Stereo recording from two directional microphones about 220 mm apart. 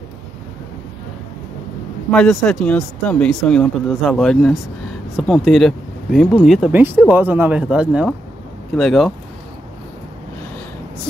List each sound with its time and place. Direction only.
2.0 s speech: 5° left (ahead or behind)